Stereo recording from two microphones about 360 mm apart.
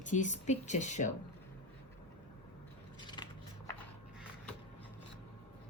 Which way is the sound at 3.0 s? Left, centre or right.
Centre.